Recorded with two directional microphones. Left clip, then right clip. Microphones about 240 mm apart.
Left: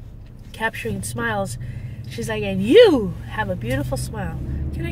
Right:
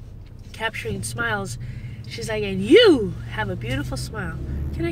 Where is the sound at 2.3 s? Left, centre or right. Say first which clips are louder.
Left 1 dB; centre.